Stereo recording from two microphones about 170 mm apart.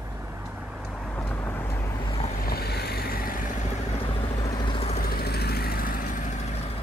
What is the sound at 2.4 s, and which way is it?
Vehicle, 65° left (ahead or behind).